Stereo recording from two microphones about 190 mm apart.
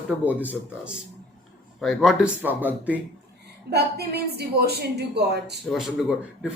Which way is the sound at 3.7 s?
60° right (ahead or behind).